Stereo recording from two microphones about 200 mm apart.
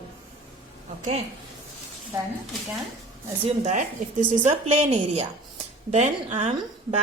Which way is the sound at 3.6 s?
40° right (ahead or behind).